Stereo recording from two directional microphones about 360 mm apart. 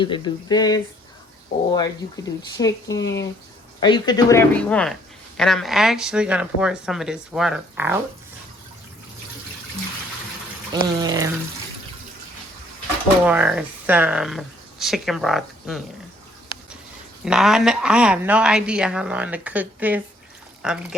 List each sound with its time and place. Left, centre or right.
0.0 s speech: centre
2.6 s speech: centre
3.0 s speech: left
3.8 s a woman's voice: centre
10.7 s speech: centre
13.2 s a woman's voice: centre
16.5 s a sound: centre
17.2 s a woman's voice: centre